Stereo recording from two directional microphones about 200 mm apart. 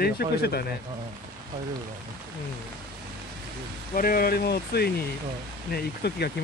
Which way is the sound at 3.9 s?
45° left (ahead or behind).